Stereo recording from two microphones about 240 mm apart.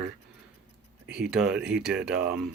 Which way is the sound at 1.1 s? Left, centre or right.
Centre.